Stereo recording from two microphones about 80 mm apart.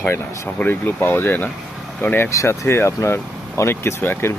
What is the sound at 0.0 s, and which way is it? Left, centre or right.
Speech, left.